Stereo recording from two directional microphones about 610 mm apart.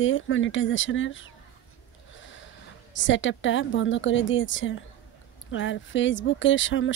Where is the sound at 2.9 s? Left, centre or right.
Centre.